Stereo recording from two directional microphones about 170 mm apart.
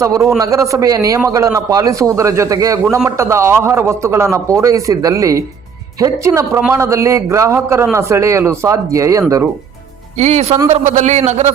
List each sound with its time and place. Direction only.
0.0 s a man's voice: 20° right (ahead or behind)
10.2 s a man's voice: 45° right (ahead or behind)